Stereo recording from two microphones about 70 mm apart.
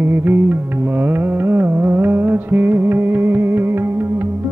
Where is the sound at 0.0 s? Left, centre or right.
Right.